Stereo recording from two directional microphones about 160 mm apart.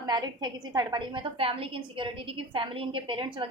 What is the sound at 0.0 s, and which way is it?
A woman's voice, 25° right (ahead or behind).